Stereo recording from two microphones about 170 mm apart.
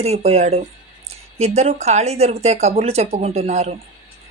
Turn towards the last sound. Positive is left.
turn(degrees=-40)  # may be behind; listen again after turning